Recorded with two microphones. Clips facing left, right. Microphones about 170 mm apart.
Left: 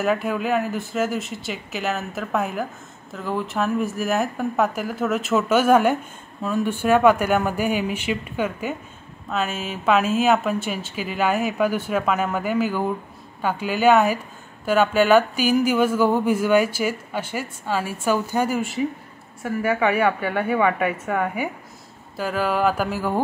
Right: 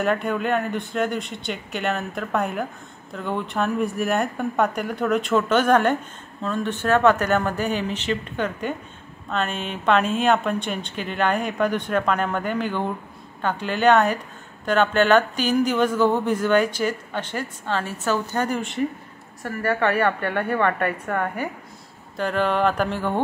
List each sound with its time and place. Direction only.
0.0 s a woman's voice: 5° left (ahead or behind)